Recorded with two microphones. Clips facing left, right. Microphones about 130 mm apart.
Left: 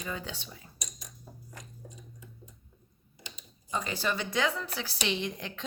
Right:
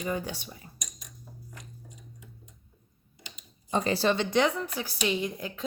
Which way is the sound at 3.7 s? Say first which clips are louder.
Right 7 dB; 35° right (ahead or behind).